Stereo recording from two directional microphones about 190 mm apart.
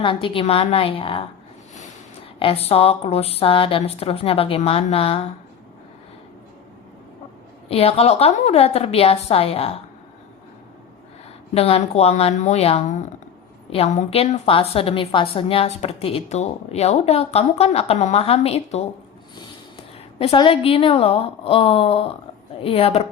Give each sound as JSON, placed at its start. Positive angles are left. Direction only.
{"t": 0.0, "sound": "a woman's voice", "side_deg": 25}
{"t": 2.4, "sound": "a woman's voice", "side_deg": 30}
{"t": 7.7, "sound": "a woman's voice", "side_deg": 30}
{"t": 11.5, "sound": "a woman's voice", "side_deg": 30}
{"t": 20.1, "sound": "a woman's voice", "side_deg": 30}